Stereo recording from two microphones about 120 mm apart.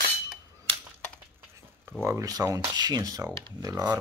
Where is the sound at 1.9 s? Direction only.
25° right (ahead or behind).